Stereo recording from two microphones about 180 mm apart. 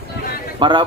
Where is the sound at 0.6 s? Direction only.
25° right (ahead or behind).